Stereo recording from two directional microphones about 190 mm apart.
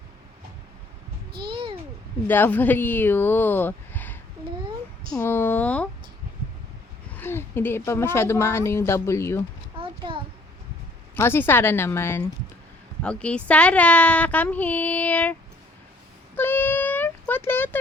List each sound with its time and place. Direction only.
1.4 s babbling: 25° right (ahead or behind)
2.2 s speech: 10° left (ahead or behind)
7.2 s speech: 10° left (ahead or behind)
9.7 s a sound: 25° right (ahead or behind)
11.1 s speech: 10° left (ahead or behind)
16.3 s a sound: 10° left (ahead or behind)